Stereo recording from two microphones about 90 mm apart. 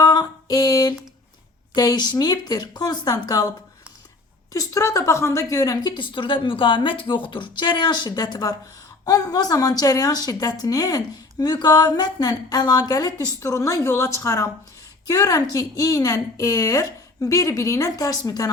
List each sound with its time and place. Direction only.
0.0 s a sound: 45° left (ahead or behind)
1.7 s speech: 50° left (ahead or behind)
4.5 s a woman's voice: 40° left (ahead or behind)
5.9 s a woman's voice: 70° left (ahead or behind); by 18.5 s 45° left (ahead or behind)